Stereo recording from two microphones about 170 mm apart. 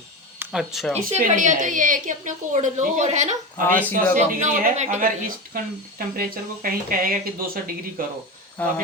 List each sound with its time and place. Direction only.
0.3 s speech: centre (ahead or behind)
0.9 s a woman's voice: 45° right (ahead or behind)
3.7 s speech: 10° left (ahead or behind)
3.9 s a woman's voice: 55° right (ahead or behind)
8.6 s speech: 10° left (ahead or behind)